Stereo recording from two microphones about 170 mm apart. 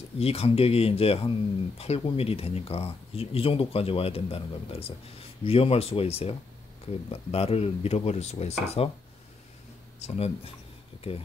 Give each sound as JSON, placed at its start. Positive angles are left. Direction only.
{"t": 0.2, "sound": "speech", "side_deg": 35}
{"t": 9.9, "sound": "speech", "side_deg": 40}